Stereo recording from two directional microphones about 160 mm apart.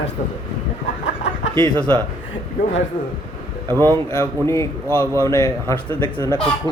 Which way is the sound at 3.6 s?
20° right (ahead or behind).